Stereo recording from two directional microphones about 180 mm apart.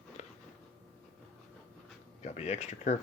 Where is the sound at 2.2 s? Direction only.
40° left (ahead or behind).